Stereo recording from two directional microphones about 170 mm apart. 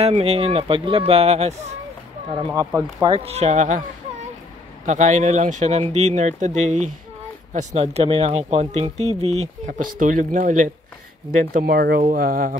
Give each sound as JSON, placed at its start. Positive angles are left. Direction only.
{"t": 0.0, "sound": "speech", "side_deg": -35}
{"t": 2.3, "sound": "speech", "side_deg": -20}
{"t": 3.2, "sound": "speech", "side_deg": -40}
{"t": 4.8, "sound": "speech", "side_deg": -45}
{"t": 11.5, "sound": "speech", "side_deg": -60}